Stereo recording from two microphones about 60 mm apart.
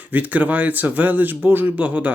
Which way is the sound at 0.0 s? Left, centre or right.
Right.